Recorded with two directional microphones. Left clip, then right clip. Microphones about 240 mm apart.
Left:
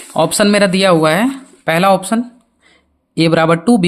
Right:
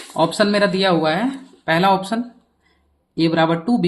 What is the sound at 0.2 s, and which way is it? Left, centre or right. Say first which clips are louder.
Speech: left 5 dB; left.